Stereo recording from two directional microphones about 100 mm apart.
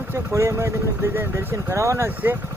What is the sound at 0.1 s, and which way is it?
Speech, 25° right (ahead or behind).